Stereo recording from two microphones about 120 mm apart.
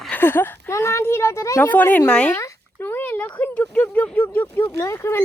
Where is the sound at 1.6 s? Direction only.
15° left (ahead or behind).